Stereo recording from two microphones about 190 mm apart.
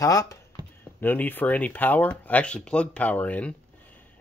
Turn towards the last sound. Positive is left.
turn(degrees=5)  # may be behind; listen again after turning